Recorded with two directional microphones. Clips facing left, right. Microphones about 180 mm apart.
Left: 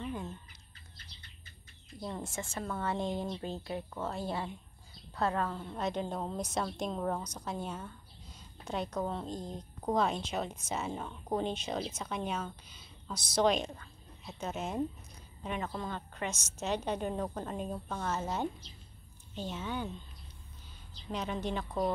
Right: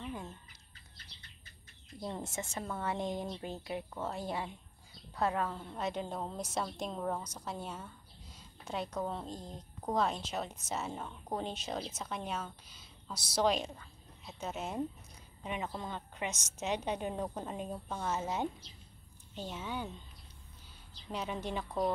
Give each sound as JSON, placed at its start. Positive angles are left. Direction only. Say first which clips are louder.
{"t": 0.0, "sound": "chicken", "louder": "left 3 dB", "side_deg": 0}
{"t": 2.0, "sound": "a woman's voice", "louder": "even", "side_deg": -20}
{"t": 21.1, "sound": "a woman's voice", "louder": "left 2 dB", "side_deg": -10}